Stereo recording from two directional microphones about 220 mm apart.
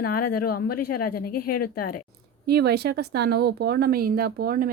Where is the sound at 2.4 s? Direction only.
50° right (ahead or behind).